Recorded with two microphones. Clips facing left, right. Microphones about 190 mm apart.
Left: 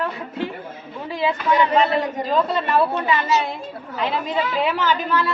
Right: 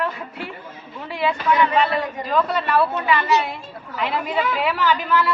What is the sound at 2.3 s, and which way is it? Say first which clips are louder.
Speech: even; 25° left (ahead or behind).